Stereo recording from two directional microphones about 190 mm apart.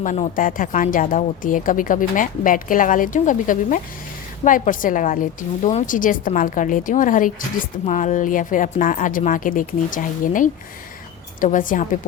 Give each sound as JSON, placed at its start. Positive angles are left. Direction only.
{"t": 0.0, "sound": "speech", "side_deg": 45}